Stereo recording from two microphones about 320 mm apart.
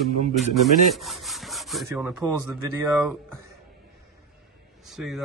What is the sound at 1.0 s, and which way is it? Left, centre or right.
Rub, centre.